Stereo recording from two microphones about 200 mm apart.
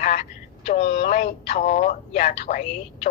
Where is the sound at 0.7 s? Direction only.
35° left (ahead or behind).